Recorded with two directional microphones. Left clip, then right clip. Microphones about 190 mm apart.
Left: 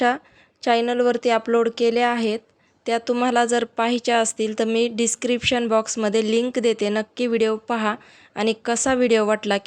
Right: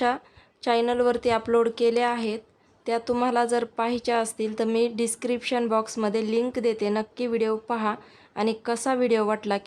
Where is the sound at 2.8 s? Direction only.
15° left (ahead or behind).